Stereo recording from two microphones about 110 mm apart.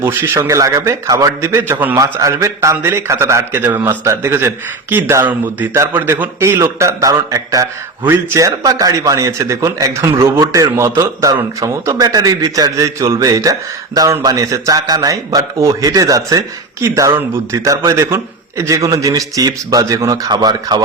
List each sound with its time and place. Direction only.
0.0 s a man's voice: 20° right (ahead or behind)
8.0 s a man's voice: 20° right (ahead or behind)